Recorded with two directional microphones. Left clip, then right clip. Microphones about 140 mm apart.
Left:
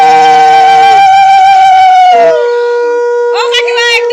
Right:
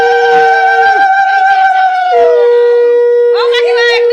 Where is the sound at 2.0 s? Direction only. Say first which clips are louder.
Left 2 dB; 25° left (ahead or behind).